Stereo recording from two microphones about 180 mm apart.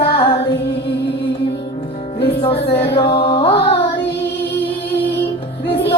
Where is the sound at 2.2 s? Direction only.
30° left (ahead or behind).